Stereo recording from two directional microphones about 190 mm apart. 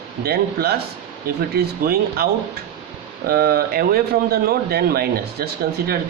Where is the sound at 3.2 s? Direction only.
50° right (ahead or behind).